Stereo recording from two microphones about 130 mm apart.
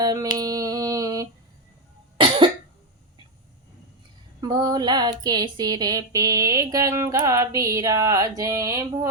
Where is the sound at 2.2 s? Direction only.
40° right (ahead or behind).